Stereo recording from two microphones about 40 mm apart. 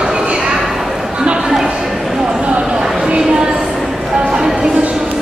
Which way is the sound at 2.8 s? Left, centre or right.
Centre.